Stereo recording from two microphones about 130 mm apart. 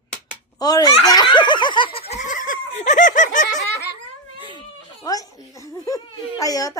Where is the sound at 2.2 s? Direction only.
85° left.